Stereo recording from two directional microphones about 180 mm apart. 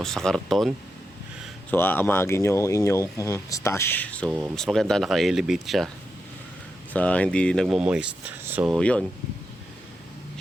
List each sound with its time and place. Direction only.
0.0 s speech: centre (ahead or behind)
1.7 s speech: 10° left (ahead or behind)
4.3 s speech: 5° right (ahead or behind)
6.9 s speech: 5° left (ahead or behind); by 8.7 s 10° right (ahead or behind)
8.7 s speech: 5° left (ahead or behind)